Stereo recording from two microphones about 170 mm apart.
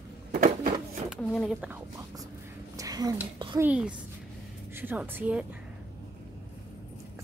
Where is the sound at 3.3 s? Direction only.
25° right (ahead or behind).